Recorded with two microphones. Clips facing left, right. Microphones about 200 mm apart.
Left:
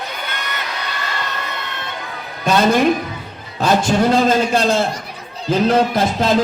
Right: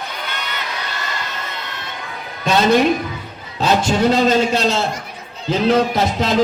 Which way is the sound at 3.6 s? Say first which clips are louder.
Left 1 dB; 50° left (ahead or behind).